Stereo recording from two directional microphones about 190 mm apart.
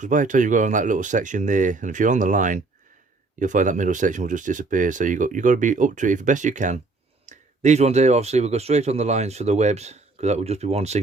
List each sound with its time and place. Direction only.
0.0 s speech: 40° right (ahead or behind)